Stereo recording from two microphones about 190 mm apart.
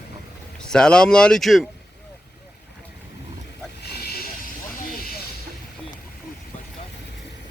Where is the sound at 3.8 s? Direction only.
55° left (ahead or behind).